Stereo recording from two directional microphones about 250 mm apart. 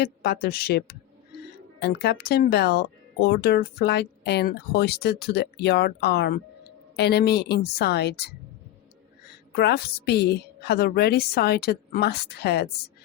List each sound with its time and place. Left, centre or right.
0.0 s speech: left
9.6 s speech: left